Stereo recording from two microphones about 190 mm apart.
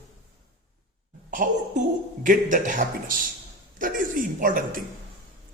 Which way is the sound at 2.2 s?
45° right (ahead or behind).